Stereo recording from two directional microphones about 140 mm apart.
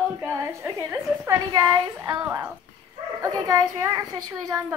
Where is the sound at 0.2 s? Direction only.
15° right (ahead or behind).